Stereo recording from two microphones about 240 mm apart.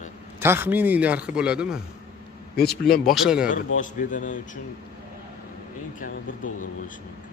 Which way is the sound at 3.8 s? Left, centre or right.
Left.